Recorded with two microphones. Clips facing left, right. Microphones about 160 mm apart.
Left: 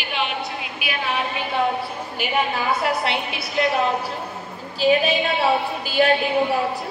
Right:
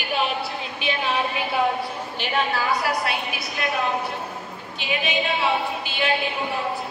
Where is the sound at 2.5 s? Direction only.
25° left (ahead or behind).